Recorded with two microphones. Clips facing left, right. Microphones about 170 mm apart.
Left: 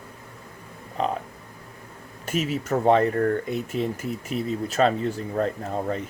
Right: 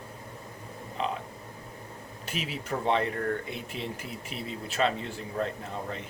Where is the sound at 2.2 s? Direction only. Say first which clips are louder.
Left 9 dB; 45° left (ahead or behind).